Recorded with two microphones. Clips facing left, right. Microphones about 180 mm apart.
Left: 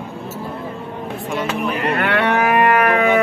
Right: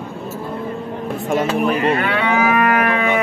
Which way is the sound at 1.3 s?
45° right (ahead or behind).